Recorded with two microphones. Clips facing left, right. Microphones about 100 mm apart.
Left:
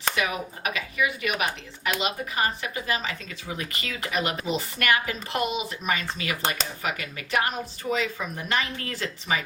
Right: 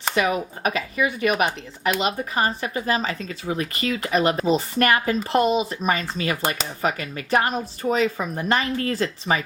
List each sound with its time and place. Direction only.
0.2 s speech: 35° right (ahead or behind)